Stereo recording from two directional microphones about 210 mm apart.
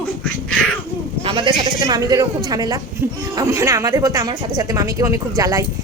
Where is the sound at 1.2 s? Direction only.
25° right (ahead or behind).